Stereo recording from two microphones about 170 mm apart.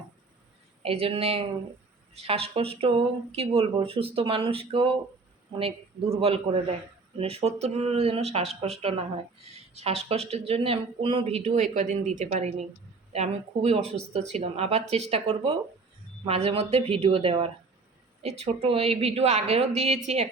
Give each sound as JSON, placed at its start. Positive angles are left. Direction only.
{"t": 0.8, "sound": "speech", "side_deg": -35}